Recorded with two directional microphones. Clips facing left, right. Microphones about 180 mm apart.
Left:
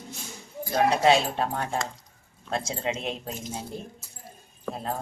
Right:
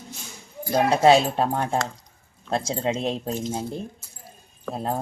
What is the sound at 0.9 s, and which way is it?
Speech, 35° right (ahead or behind).